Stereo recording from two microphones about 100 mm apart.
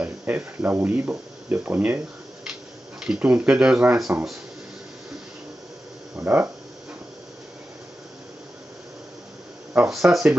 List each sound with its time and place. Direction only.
0.0 s speech: 15° right (ahead or behind)
6.1 s speech: 20° right (ahead or behind)
9.8 s speech: centre (ahead or behind)